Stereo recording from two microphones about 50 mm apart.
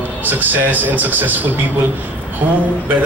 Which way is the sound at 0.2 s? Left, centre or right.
Right.